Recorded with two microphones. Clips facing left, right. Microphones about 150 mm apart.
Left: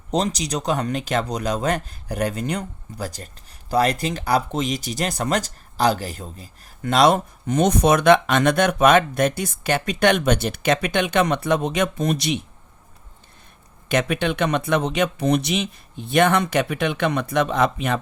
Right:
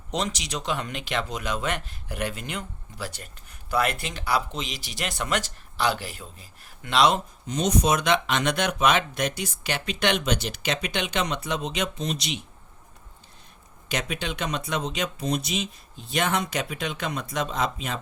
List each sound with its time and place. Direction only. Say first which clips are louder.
0.1 s speech: left 7 dB; 35° left (ahead or behind); by 12.4 s 55° left (ahead or behind)
13.8 s speech: left 9 dB; 60° left (ahead or behind)